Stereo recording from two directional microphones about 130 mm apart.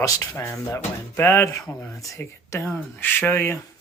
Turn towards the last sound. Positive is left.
turn(degrees=20)  # may be behind; listen again after turning